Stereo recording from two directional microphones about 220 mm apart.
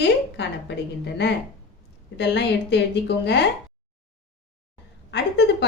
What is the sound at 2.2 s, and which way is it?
A woman's voice, 50° left (ahead or behind).